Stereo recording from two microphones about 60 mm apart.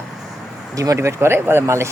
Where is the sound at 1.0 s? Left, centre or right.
Right.